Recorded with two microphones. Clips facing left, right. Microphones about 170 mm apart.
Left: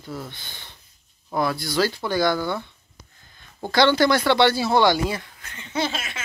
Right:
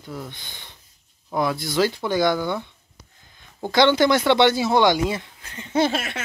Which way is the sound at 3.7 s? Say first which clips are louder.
Right 1 dB; 20° right (ahead or behind).